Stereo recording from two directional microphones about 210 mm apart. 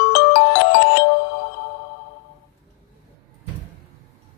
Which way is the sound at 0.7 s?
50° left (ahead or behind).